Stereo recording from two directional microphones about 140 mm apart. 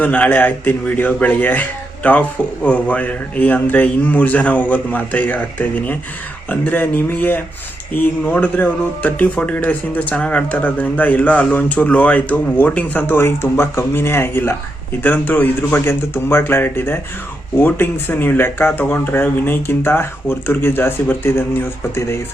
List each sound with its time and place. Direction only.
0.0 s speech: 10° left (ahead or behind)